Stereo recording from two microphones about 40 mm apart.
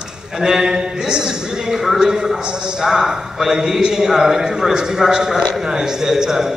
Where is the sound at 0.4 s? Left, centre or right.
Centre.